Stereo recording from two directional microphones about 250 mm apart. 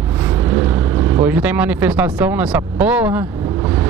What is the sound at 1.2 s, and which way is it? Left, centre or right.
Speech, centre.